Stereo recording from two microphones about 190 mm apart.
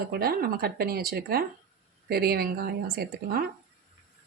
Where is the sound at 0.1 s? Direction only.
55° right (ahead or behind).